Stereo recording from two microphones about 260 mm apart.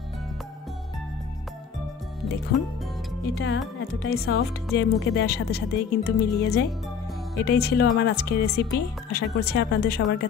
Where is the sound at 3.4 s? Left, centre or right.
Left.